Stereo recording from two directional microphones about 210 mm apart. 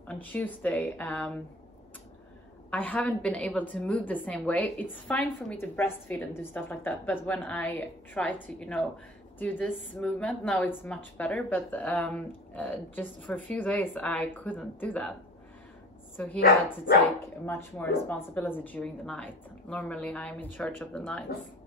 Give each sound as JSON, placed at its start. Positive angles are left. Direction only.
{"t": 0.0, "sound": "a woman's voice", "side_deg": 5}
{"t": 2.7, "sound": "a woman's voice", "side_deg": 5}
{"t": 16.3, "sound": "speech", "side_deg": 45}
{"t": 17.5, "sound": "a woman's voice", "side_deg": 10}